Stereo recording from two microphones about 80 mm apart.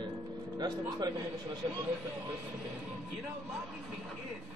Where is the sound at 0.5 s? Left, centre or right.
Right.